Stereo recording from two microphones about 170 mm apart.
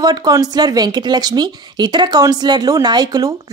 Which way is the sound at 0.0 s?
25° right (ahead or behind).